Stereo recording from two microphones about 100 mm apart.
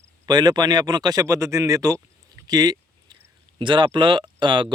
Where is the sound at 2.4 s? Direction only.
40° right (ahead or behind).